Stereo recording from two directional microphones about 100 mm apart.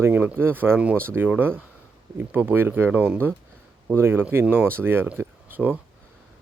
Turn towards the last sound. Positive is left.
turn(degrees=-15)  # may be behind; listen again after turning